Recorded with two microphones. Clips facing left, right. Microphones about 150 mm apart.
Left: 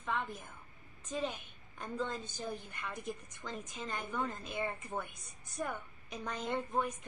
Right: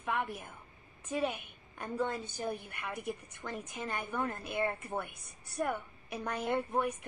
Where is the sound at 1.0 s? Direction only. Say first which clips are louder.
Right 4 dB; 60° right (ahead or behind).